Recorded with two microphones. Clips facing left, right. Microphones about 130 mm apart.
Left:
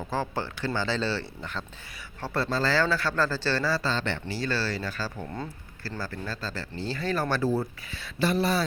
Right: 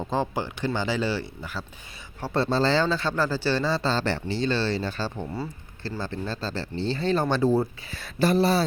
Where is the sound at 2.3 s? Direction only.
25° right (ahead or behind).